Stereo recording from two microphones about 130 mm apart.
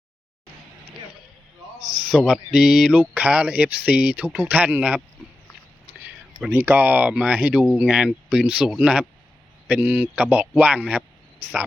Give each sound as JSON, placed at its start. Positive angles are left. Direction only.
{"t": 1.8, "sound": "a sound", "side_deg": -40}
{"t": 2.0, "sound": "speech", "side_deg": -5}
{"t": 6.5, "sound": "speech", "side_deg": -15}